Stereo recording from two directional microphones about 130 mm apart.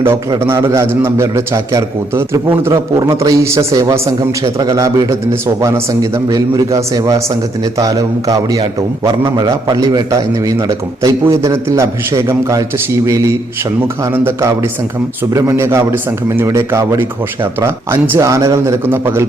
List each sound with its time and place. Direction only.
0.3 s a man's voice: 20° right (ahead or behind)